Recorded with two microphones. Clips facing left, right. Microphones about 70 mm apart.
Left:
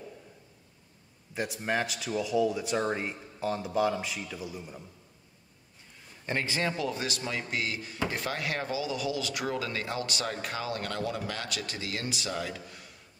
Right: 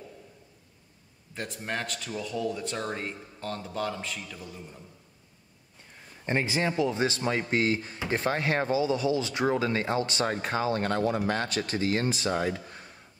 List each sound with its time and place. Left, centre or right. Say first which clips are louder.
1.3 s a man's voice: left 3 dB; centre
6.2 s speech: right 3 dB; right